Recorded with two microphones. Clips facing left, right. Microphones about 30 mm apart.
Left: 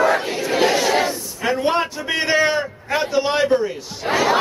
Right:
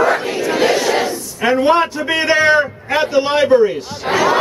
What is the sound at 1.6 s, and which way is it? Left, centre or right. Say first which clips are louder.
A man's voice: right 6 dB; centre.